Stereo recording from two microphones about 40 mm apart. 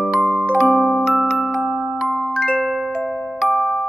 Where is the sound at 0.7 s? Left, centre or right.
Centre.